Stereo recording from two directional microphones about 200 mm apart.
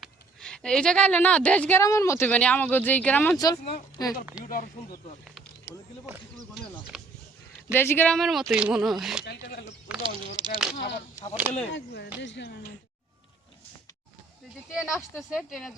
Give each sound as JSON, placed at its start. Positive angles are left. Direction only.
{"t": 0.0, "sound": "a woman's voice", "side_deg": 5}
{"t": 3.3, "sound": "speech", "side_deg": 20}
{"t": 7.7, "sound": "speech", "side_deg": 10}
{"t": 9.2, "sound": "speech", "side_deg": 55}
{"t": 10.0, "sound": "speech", "side_deg": -25}
{"t": 10.8, "sound": "speech", "side_deg": 55}
{"t": 12.2, "sound": "speech", "side_deg": 65}
{"t": 14.7, "sound": "speech", "side_deg": -5}